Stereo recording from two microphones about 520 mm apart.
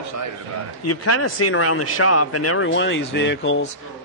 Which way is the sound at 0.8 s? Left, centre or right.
Left.